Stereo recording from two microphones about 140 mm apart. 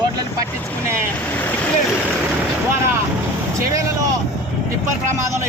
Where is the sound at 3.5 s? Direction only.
20° right (ahead or behind).